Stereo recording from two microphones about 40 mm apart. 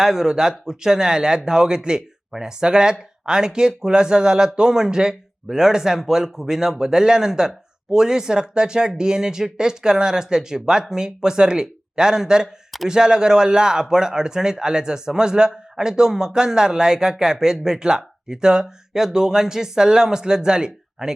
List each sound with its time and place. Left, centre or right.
0.0 s speech: centre